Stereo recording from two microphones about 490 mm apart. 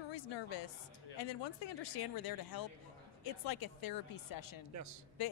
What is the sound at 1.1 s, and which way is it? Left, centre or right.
Speech, left.